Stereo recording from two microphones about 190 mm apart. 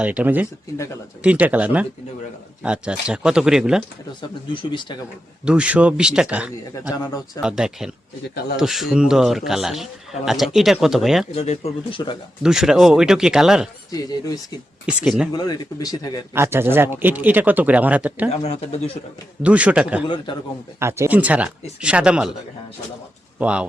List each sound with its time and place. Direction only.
0.0 s speech: 5° right (ahead or behind)
4.5 s speech: 25° left (ahead or behind)
5.5 s speech: 5° right (ahead or behind)
11.3 s speech: 35° left (ahead or behind)
12.4 s speech: 5° right (ahead or behind)
14.8 s speech: 5° right (ahead or behind)
15.3 s speech: 25° left (ahead or behind)
16.3 s speech: 10° right (ahead or behind)
18.3 s speech: 35° left (ahead or behind)
19.4 s speech: 5° right (ahead or behind)
23.4 s speech: 5° right (ahead or behind)